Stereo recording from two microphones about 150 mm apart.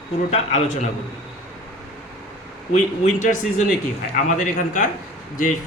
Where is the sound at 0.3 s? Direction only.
50° left (ahead or behind).